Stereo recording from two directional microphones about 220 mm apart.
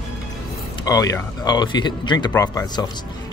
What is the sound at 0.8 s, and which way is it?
Speech, 15° left (ahead or behind).